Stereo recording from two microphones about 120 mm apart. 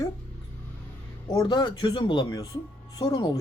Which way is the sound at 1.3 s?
35° left (ahead or behind).